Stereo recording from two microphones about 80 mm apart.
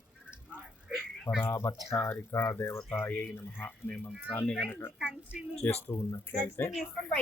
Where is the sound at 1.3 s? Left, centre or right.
Left.